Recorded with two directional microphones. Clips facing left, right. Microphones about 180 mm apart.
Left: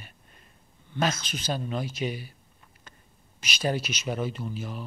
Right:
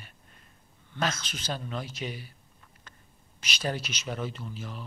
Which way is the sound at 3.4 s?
10° left (ahead or behind).